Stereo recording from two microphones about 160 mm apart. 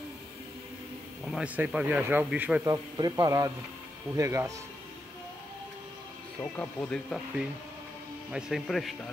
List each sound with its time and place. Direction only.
1.2 s a sound: centre (ahead or behind)
1.6 s speech: 10° right (ahead or behind)
2.7 s speech: 25° right (ahead or behind)
6.4 s speech: 10° left (ahead or behind)
8.3 s a man's voice: 5° right (ahead or behind)